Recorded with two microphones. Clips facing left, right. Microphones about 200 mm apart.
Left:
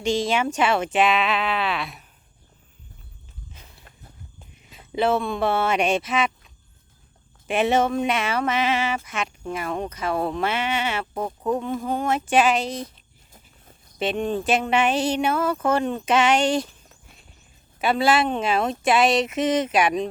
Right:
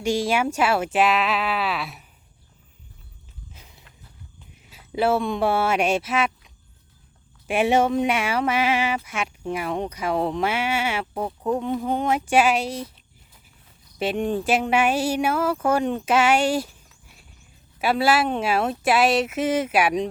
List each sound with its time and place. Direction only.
0.0 s speech: 10° right (ahead or behind)
3.8 s walk: 50° left (ahead or behind)
4.5 s speech: 5° right (ahead or behind)
7.4 s speech: 10° right (ahead or behind)
14.0 s speech: 10° right (ahead or behind)
17.7 s speech: 5° right (ahead or behind)